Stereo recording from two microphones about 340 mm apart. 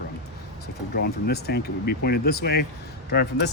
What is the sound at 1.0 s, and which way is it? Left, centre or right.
Speech, left.